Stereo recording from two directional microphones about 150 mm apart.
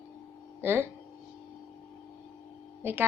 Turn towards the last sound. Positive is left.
turn(degrees=-15)  # may be behind; listen again after turning